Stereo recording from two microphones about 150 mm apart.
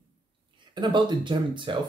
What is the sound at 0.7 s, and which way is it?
Speech, 30° right (ahead or behind).